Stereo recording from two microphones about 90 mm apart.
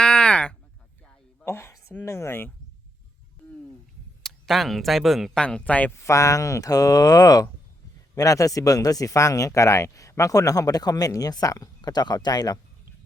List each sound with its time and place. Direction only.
0.0 s a sound: 10° left (ahead or behind)
1.5 s a sound: 30° left (ahead or behind)
2.0 s speech: 30° left (ahead or behind)
4.2 s speech: centre (ahead or behind)
5.4 s speech: 10° left (ahead or behind)
5.9 s speech: 35° left (ahead or behind)